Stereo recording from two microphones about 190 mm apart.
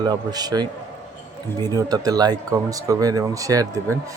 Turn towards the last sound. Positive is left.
turn(degrees=-20)  # may be behind; listen again after turning